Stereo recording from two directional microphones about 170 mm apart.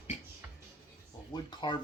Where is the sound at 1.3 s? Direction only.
25° left (ahead or behind).